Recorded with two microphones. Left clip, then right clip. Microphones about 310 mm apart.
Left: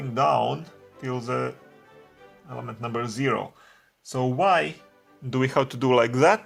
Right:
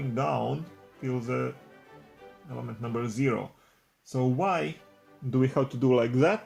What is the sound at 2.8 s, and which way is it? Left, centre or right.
Speech, left.